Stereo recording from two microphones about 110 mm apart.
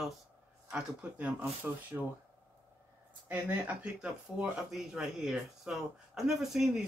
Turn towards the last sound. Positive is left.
turn(degrees=-5)  # may be behind; listen again after turning